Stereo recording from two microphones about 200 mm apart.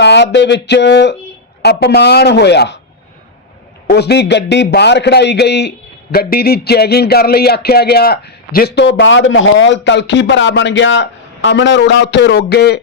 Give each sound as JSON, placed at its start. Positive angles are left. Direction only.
{"t": 0.0, "sound": "a man's voice", "side_deg": 60}
{"t": 3.8, "sound": "a man's voice", "side_deg": 55}